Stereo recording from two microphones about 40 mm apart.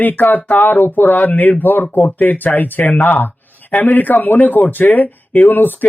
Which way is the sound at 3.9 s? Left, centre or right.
Left.